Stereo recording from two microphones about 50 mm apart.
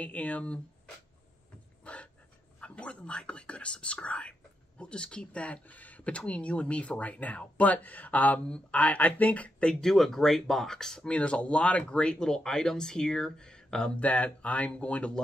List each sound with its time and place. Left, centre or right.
0.0 s speech: left
1.8 s dog: left
2.6 s speech: left
9.7 s speech: centre
11.1 s speech: left
13.9 s speech: left